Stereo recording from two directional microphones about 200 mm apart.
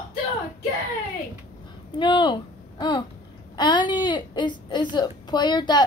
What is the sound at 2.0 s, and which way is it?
A woman's voice, 25° left (ahead or behind).